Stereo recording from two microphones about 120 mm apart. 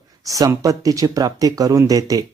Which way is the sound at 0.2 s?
30° right (ahead or behind).